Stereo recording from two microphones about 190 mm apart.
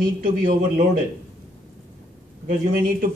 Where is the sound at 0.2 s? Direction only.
50° right (ahead or behind).